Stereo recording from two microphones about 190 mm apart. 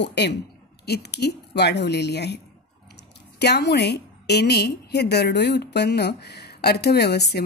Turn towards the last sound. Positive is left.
turn(degrees=60)  # may be behind; listen again after turning